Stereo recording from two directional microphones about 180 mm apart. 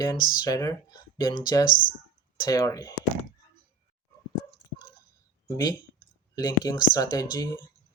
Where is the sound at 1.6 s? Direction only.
50° left (ahead or behind).